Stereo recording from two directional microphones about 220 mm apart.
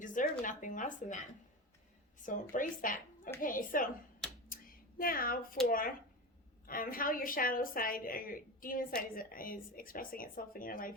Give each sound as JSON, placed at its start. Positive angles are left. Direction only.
{"t": 0.0, "sound": "speech", "side_deg": 35}
{"t": 2.2, "sound": "a woman's voice", "side_deg": 35}
{"t": 4.9, "sound": "a woman's voice", "side_deg": 40}